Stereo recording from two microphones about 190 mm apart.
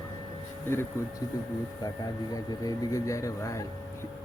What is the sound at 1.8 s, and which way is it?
Speech, 20° left (ahead or behind).